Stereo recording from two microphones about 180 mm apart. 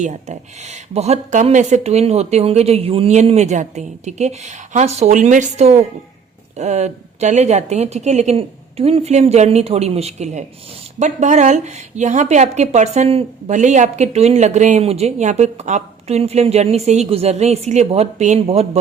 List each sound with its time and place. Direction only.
0.0 s a woman's voice: 40° right (ahead or behind)